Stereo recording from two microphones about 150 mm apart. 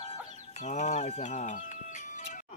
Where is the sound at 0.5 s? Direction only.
50° left (ahead or behind).